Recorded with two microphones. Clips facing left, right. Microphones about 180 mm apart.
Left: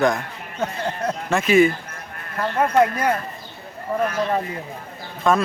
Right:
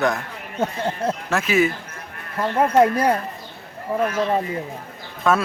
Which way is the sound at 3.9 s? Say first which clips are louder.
Right 1 dB; 10° right (ahead or behind).